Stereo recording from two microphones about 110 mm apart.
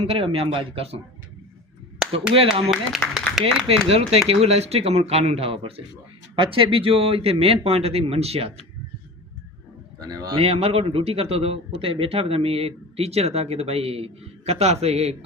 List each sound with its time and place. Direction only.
0.0 s a man's voice: 60° right (ahead or behind)
2.3 s a man's voice: 55° right (ahead or behind)
2.6 s speech: 5° right (ahead or behind)
3.7 s a man's voice: 65° right (ahead or behind)
10.0 s speech: 35° right (ahead or behind)
10.3 s a man's voice: 60° right (ahead or behind)